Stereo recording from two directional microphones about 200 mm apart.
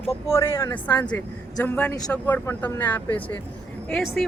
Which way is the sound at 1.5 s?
10° left (ahead or behind).